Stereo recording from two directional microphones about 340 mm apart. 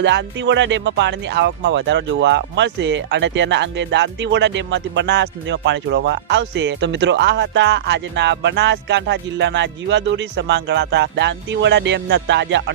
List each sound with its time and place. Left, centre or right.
0.0 s speech: right